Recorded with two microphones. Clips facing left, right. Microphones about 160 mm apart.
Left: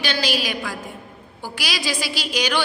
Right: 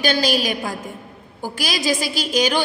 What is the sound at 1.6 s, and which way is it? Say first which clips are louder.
A woman's voice: right 5 dB; 45° right (ahead or behind).